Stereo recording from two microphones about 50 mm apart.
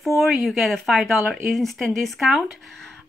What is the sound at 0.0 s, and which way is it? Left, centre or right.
Speech, centre.